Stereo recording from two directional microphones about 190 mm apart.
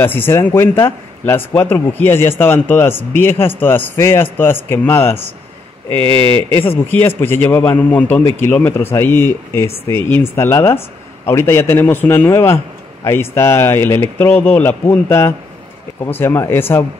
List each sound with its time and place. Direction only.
0.0 s speech: 10° left (ahead or behind)
5.9 s speech: 25° right (ahead or behind)
6.5 s speech: 10° left (ahead or behind)